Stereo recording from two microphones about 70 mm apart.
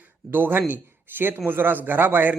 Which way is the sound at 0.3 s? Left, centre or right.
Right.